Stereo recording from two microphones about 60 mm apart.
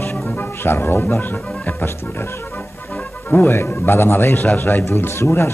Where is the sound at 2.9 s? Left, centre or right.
Centre.